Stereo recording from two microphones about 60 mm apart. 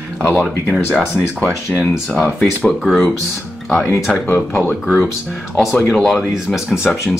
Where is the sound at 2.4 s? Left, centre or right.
Left.